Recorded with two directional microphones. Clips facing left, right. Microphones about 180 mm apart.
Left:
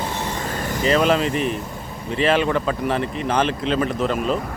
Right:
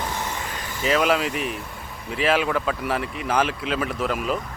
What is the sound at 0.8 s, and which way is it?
Speech, 5° right (ahead or behind).